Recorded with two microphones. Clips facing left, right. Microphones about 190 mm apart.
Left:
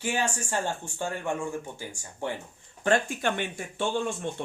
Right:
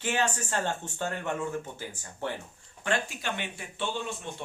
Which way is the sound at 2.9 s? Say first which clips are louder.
Left 6 dB; 50° left (ahead or behind).